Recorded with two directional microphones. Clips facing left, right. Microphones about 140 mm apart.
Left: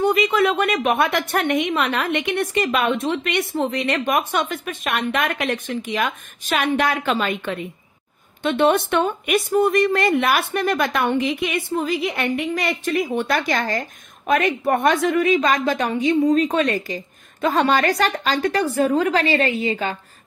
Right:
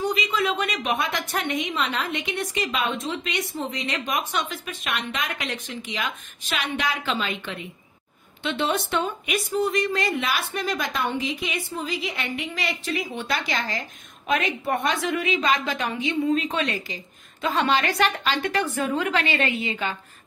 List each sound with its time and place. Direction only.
0.0 s a woman's voice: 60° left (ahead or behind); by 20.0 s 40° left (ahead or behind)